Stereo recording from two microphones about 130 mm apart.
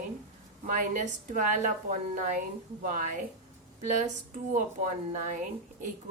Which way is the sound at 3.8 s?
70° right (ahead or behind).